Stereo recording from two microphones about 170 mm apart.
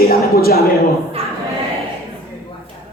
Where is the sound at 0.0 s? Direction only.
65° left (ahead or behind).